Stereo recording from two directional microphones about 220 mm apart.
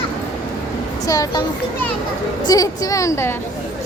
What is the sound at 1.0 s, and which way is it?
Speech, 15° left (ahead or behind).